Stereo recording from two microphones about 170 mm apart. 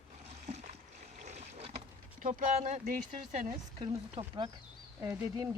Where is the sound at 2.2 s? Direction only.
50° right (ahead or behind).